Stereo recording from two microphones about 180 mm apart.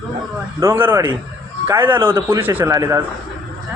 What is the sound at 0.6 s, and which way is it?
A man's voice, 15° right (ahead or behind).